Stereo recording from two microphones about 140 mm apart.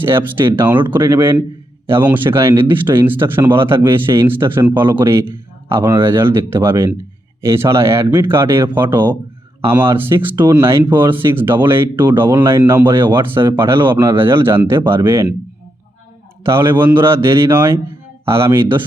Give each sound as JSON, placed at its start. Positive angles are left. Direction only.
{"t": 0.0, "sound": "speech", "side_deg": -15}
{"t": 16.4, "sound": "speech", "side_deg": -15}